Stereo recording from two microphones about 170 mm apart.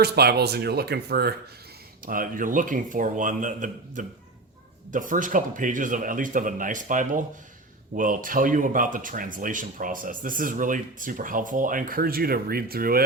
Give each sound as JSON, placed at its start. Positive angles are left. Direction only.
{"t": 0.0, "sound": "speech", "side_deg": -70}
{"t": 2.0, "sound": "speech", "side_deg": -55}